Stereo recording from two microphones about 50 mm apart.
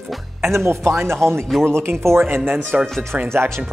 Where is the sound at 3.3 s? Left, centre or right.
Right.